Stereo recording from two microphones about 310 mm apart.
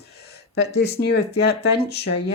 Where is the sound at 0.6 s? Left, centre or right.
Left.